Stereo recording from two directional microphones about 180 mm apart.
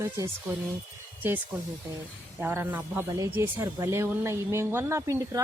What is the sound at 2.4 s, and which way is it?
Speech, 10° right (ahead or behind).